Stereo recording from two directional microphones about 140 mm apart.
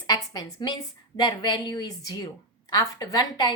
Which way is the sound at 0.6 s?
30° left (ahead or behind).